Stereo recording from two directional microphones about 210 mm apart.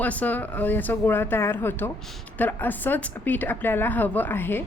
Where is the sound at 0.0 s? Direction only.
5° left (ahead or behind).